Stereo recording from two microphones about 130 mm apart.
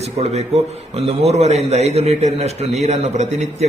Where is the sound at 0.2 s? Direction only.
55° right (ahead or behind).